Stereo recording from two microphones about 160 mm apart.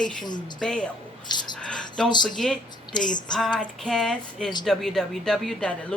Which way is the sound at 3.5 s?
5° left (ahead or behind).